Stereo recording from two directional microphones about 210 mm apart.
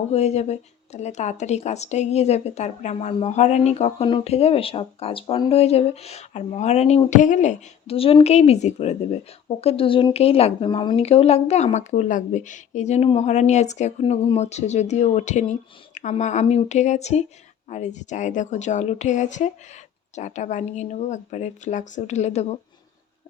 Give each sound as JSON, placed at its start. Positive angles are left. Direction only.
{"t": 0.1, "sound": "speech", "side_deg": 30}